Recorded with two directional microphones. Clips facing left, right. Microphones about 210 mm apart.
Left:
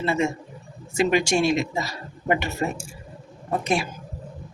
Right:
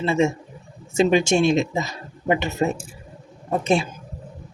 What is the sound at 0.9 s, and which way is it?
Speech, 25° right (ahead or behind).